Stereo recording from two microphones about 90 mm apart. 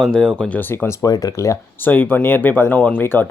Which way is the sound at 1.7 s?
20° left (ahead or behind).